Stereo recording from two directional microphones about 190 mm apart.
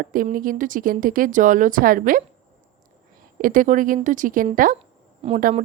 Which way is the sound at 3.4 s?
45° right (ahead or behind).